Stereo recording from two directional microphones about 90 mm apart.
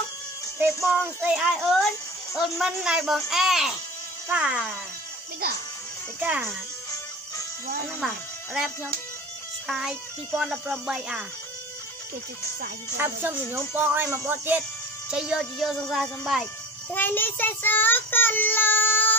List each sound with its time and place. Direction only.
0.9 s speech: 15° right (ahead or behind)
1.3 s a child's voice: centre (ahead or behind)
6.1 s speech: 15° right (ahead or behind)
9.7 s a child's voice: centre (ahead or behind)
12.9 s speech: 25° right (ahead or behind)
15.0 s a child's voice: 5° right (ahead or behind)
16.9 s child singing: 20° left (ahead or behind)